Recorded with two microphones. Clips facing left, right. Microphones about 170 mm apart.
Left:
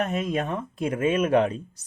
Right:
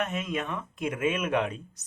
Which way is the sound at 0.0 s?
35° left (ahead or behind).